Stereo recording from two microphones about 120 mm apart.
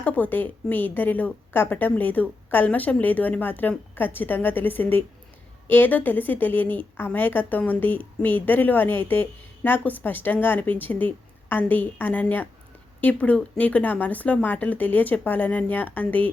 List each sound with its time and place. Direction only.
0.0 s a woman's voice: 15° left (ahead or behind)